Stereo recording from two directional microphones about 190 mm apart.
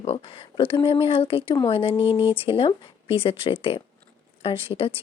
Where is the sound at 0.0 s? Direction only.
30° left (ahead or behind).